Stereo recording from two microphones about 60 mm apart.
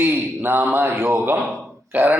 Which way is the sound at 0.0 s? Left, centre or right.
Right.